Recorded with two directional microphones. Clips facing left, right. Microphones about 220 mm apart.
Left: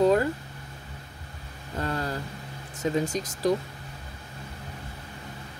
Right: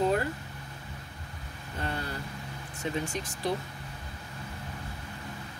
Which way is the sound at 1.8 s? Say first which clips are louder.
Left 5 dB; 90° left.